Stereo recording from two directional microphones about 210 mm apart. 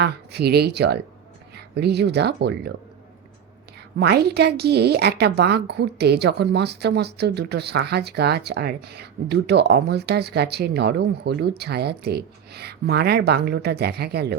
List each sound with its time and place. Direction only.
0.0 s a woman's voice: 50° right (ahead or behind)
4.0 s a woman's voice: 50° right (ahead or behind)